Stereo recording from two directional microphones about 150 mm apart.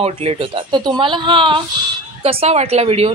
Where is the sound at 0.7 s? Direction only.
30° right (ahead or behind).